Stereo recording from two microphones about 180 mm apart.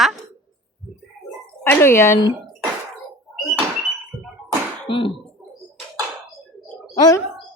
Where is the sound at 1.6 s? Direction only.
15° left (ahead or behind).